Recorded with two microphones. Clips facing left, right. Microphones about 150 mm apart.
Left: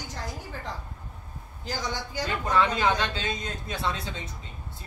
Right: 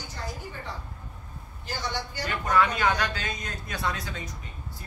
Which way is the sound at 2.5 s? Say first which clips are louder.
Even; 25° left (ahead or behind).